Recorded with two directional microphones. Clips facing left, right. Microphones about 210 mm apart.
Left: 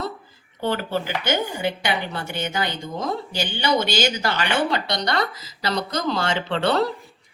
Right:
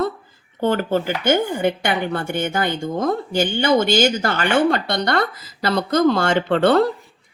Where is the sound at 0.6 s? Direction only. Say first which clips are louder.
Right 5 dB; 50° right (ahead or behind).